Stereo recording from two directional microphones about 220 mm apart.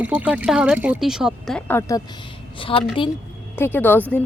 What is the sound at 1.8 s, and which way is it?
Speech, 15° left (ahead or behind).